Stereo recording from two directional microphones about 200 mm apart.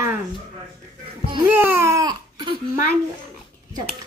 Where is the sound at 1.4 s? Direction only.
10° right (ahead or behind).